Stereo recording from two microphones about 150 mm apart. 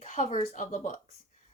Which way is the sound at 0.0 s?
55° left (ahead or behind).